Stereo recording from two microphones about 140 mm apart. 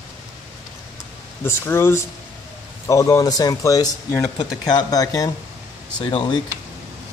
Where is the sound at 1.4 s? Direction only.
15° left (ahead or behind).